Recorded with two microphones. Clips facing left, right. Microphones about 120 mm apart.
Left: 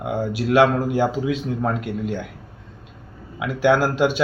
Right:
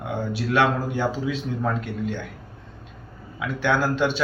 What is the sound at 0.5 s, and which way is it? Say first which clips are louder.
Speech: left 5 dB; 10° left (ahead or behind).